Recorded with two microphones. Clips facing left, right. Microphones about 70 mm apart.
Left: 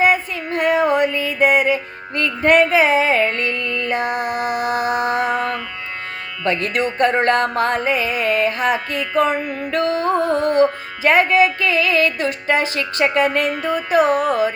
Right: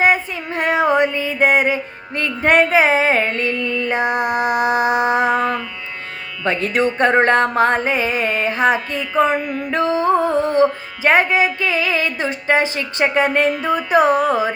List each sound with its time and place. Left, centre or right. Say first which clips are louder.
0.0 s child singing: even; right
1.1 s mantra: even; right
2.1 s music: left 1 dB; centre
2.6 s music: right 2 dB; right; by 3.8 s centre
3.8 s music: right 2 dB; right
6.4 s speech: right 1 dB; centre
7.9 s music: even; right